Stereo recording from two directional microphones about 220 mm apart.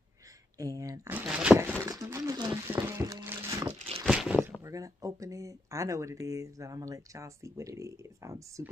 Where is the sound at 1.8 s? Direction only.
15° right (ahead or behind).